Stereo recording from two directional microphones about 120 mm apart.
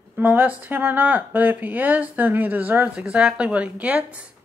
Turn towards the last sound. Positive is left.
turn(degrees=-10)  # may be behind; listen again after turning